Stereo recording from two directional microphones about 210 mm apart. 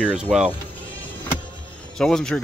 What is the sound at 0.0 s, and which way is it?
Speech, 5° right (ahead or behind).